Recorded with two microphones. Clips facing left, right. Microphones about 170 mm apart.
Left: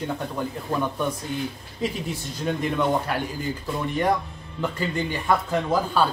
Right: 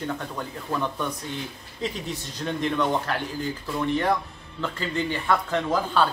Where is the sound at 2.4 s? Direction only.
10° left (ahead or behind).